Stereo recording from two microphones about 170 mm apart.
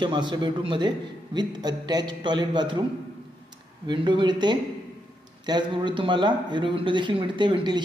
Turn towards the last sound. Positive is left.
turn(degrees=-25)  # may be behind; listen again after turning